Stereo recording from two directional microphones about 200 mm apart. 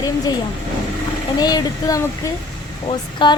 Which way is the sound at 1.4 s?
20° left (ahead or behind).